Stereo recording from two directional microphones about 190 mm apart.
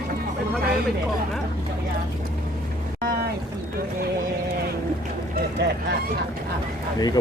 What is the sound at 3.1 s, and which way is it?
Speech, 55° right (ahead or behind).